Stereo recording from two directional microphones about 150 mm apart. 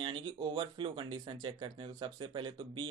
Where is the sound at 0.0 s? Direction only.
35° right (ahead or behind).